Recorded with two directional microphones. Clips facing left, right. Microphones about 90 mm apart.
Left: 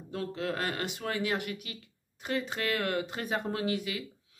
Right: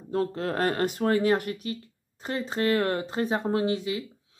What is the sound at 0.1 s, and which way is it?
Speech, 40° right (ahead or behind).